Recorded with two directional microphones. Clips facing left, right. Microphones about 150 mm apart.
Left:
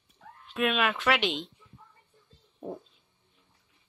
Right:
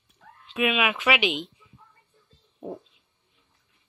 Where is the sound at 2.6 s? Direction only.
Centre (ahead or behind).